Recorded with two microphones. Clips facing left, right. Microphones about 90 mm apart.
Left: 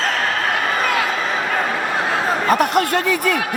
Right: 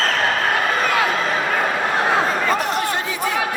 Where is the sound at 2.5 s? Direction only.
60° left (ahead or behind).